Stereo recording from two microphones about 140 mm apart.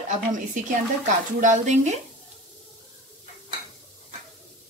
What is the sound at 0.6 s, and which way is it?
Speech, 65° right (ahead or behind).